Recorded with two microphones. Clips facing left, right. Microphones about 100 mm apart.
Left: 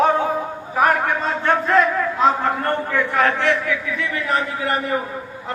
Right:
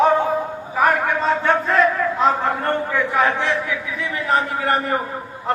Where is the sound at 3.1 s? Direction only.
15° right (ahead or behind).